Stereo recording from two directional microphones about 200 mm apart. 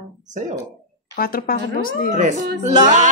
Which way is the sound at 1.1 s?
45° left (ahead or behind).